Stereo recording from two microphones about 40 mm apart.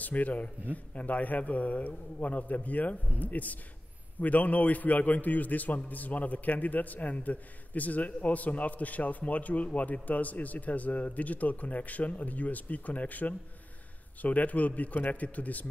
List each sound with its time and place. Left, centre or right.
0.0 s a man's voice: left